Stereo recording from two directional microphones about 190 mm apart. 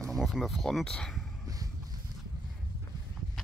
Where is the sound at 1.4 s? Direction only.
20° right (ahead or behind).